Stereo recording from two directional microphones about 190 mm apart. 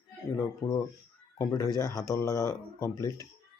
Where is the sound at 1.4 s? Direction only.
15° left (ahead or behind).